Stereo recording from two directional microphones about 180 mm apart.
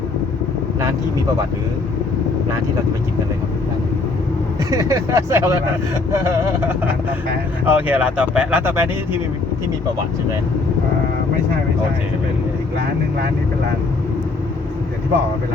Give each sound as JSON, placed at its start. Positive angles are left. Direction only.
{"t": 4.7, "sound": "speech", "side_deg": -20}